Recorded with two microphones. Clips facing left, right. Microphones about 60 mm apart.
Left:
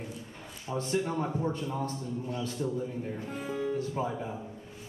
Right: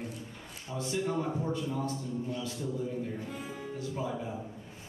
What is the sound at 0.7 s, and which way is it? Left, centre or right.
A man's voice, left.